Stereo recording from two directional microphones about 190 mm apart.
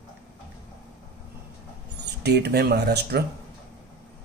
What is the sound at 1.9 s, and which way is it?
Speech, 60° right (ahead or behind).